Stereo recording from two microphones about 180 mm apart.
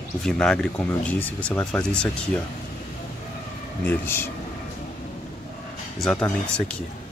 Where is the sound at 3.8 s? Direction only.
10° left (ahead or behind).